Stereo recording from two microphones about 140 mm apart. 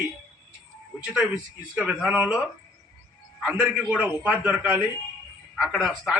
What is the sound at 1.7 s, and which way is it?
Speech, 10° right (ahead or behind).